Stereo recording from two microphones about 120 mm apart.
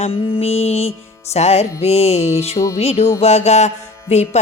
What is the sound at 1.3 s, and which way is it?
Mantra, 65° left (ahead or behind).